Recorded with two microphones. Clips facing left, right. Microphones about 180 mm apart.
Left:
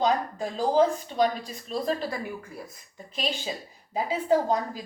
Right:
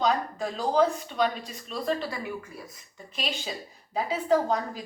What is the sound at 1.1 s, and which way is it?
Speech, 35° left (ahead or behind).